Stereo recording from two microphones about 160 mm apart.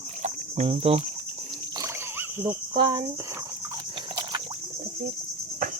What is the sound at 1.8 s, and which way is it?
Splash, 15° right (ahead or behind).